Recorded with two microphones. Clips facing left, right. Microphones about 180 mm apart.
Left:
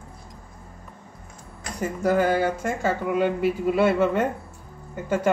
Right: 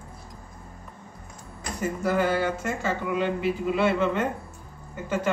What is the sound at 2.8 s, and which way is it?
A woman's voice, 45° left (ahead or behind).